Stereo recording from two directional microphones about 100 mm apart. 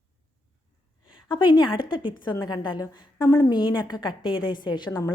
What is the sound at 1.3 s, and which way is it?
A woman's voice, 50° left (ahead or behind).